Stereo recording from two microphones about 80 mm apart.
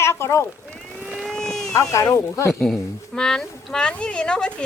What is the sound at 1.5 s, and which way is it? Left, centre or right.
Speech, left.